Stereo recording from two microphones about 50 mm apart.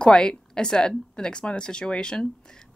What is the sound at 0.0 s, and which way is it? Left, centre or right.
A woman's voice, centre.